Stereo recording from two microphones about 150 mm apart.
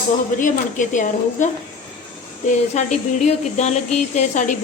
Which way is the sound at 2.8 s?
50° left (ahead or behind).